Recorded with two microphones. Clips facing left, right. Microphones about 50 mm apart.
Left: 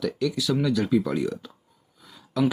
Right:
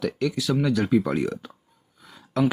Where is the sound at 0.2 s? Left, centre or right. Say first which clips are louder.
Right 1 dB; right.